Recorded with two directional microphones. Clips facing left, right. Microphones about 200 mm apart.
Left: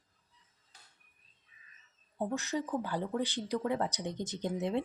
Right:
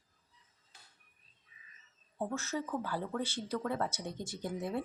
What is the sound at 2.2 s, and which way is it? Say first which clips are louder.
A woman's voice: left 2 dB; 15° left (ahead or behind).